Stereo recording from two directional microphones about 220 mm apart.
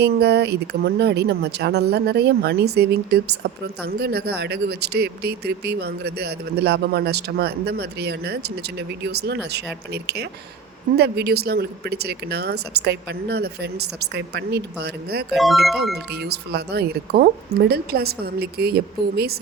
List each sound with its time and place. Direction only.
0.0 s speech: 50° right (ahead or behind)
15.3 s speech: centre (ahead or behind)
16.0 s speech: 45° right (ahead or behind)